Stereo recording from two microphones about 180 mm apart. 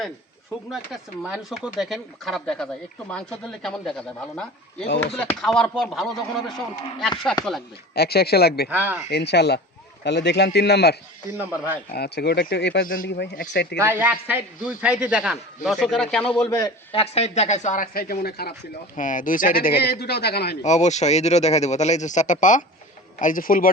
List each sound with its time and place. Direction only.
1.2 s a man's voice: centre (ahead or behind)
5.1 s a man's voice: 5° left (ahead or behind)
7.9 s speech: 60° left (ahead or behind)
8.7 s speech: 10° right (ahead or behind)
9.0 s a man's voice: 65° left (ahead or behind)
11.3 s speech: 10° right (ahead or behind)
11.9 s a man's voice: 65° left (ahead or behind)
13.7 s a man's voice: 10° right (ahead or behind); by 16.5 s 5° left (ahead or behind)
16.5 s a man's voice: 20° left (ahead or behind)
17.0 s speech: 35° left (ahead or behind); by 18.5 s 60° left (ahead or behind)
18.9 s speech: 45° left (ahead or behind); by 20.6 s 65° left (ahead or behind)
20.6 s speech: 40° left (ahead or behind)